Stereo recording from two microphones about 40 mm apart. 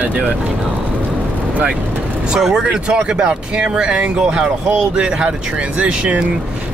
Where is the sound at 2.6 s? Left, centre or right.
Right.